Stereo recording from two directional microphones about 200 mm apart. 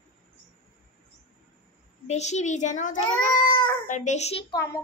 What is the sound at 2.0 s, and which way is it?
A woman's voice, 35° left (ahead or behind).